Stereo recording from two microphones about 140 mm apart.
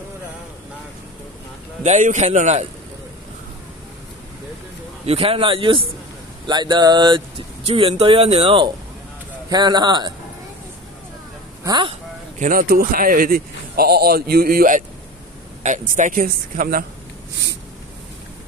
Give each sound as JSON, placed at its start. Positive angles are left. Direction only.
{"t": 1.8, "sound": "a man's voice", "side_deg": -60}
{"t": 5.0, "sound": "speech", "side_deg": -45}
{"t": 9.5, "sound": "speech", "side_deg": -30}
{"t": 11.6, "sound": "speech", "side_deg": -30}
{"t": 12.4, "sound": "speech", "side_deg": -75}
{"t": 15.6, "sound": "speech", "side_deg": -65}